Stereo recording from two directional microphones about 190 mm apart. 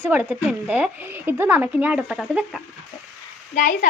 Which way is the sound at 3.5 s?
45° left (ahead or behind).